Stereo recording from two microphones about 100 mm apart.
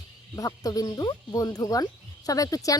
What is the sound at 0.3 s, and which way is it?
Speech, 35° left (ahead or behind).